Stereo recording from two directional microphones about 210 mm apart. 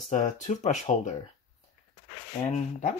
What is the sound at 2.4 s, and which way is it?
Speech, 30° left (ahead or behind).